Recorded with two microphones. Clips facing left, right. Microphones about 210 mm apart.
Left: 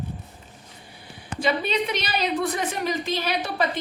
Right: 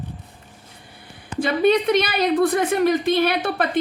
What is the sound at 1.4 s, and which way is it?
A woman's voice, 55° right (ahead or behind).